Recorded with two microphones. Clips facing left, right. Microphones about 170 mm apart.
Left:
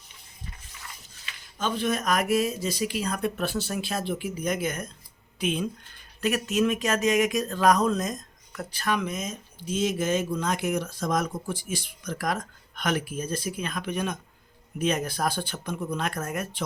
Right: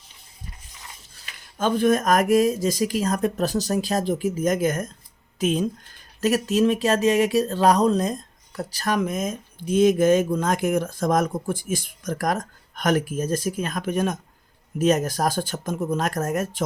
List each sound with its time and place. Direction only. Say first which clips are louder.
1.2 s speech: right 6 dB; 50° right (ahead or behind)